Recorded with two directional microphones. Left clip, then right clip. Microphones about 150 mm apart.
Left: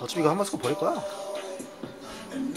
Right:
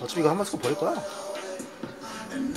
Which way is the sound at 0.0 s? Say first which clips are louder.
Even; 15° left (ahead or behind).